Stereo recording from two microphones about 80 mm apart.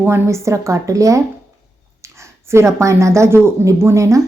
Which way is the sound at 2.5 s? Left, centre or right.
Right.